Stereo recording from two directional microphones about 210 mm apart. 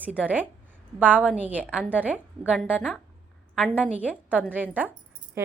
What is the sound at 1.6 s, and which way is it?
Speech, 5° left (ahead or behind).